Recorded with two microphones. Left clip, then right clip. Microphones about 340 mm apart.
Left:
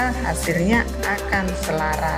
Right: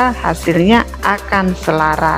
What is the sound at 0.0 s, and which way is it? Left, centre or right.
A woman's voice, centre.